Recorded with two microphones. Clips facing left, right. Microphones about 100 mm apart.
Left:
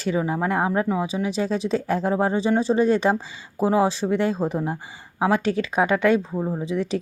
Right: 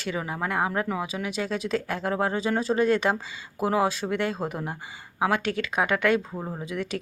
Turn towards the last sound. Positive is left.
turn(degrees=30)  # may be behind; listen again after turning